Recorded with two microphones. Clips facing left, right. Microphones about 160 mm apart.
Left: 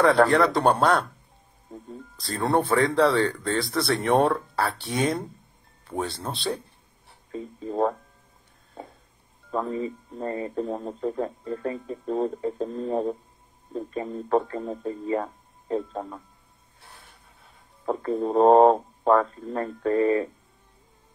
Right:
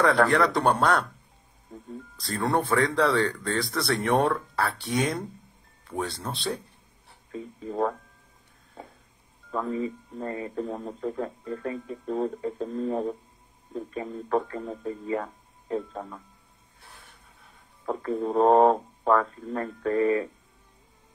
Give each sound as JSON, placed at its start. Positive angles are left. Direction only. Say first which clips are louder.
{"t": 0.0, "sound": "speech", "louder": "left 3 dB", "side_deg": 30}
{"t": 2.1, "sound": "speech", "louder": "left 2 dB", "side_deg": 30}
{"t": 8.8, "sound": "a sound", "louder": "left 3 dB", "side_deg": 25}
{"t": 9.5, "sound": "speech", "louder": "left 1 dB", "side_deg": 30}
{"t": 17.8, "sound": "speech", "louder": "left 2 dB", "side_deg": 30}